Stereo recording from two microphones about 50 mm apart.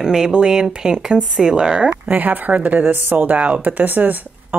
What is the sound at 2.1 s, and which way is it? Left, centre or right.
Speech, right.